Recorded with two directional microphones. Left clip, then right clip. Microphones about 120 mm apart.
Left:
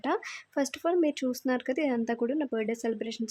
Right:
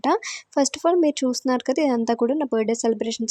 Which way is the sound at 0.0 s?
35° right (ahead or behind).